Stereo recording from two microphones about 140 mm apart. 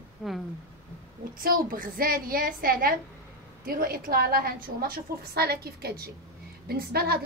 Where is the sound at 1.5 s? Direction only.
80° right.